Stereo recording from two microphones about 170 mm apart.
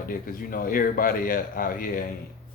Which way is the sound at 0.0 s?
55° left (ahead or behind).